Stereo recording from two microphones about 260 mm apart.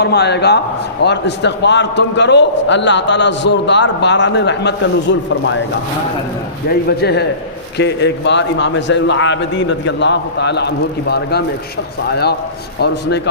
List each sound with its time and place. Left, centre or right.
0.0 s a man's voice: left
6.7 s a man's voice: left